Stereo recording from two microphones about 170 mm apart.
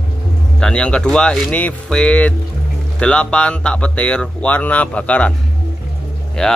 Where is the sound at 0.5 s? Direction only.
5° left (ahead or behind).